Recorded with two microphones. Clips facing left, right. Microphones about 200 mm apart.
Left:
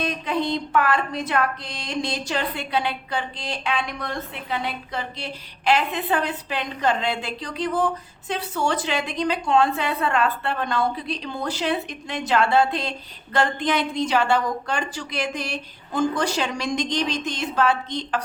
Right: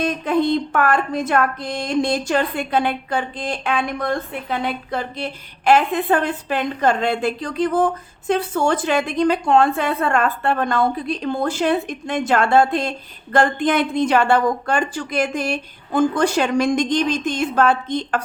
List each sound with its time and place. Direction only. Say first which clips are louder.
0.0 s speech: right 6 dB; 50° right (ahead or behind)